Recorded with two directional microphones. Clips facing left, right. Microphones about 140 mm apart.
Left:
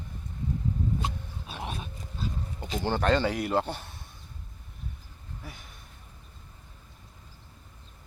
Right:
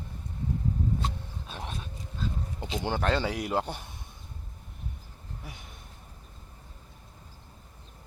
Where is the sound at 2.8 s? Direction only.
5° right (ahead or behind).